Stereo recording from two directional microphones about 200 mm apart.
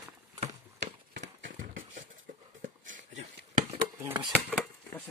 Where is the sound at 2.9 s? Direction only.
35° right (ahead or behind).